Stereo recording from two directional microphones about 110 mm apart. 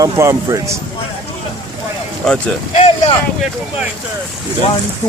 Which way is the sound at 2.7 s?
90° left.